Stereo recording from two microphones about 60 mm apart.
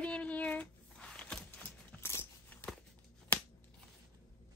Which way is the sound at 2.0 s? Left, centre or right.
Left.